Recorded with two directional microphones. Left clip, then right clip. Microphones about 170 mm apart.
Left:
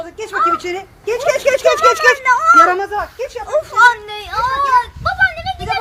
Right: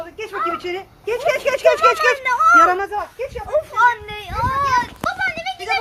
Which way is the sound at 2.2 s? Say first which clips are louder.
Even; 45° right (ahead or behind).